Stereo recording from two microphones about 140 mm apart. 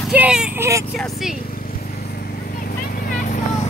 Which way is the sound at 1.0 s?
Centre (ahead or behind).